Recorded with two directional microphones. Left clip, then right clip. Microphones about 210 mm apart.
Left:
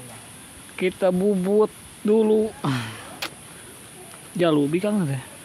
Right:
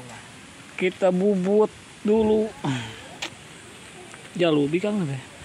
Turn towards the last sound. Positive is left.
turn(degrees=15)  # may be behind; listen again after turning